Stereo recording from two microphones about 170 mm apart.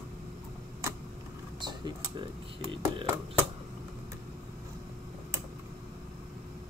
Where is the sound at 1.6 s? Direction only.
25° right (ahead or behind).